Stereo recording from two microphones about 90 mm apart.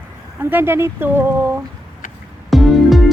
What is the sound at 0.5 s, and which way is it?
Speech, 25° right (ahead or behind).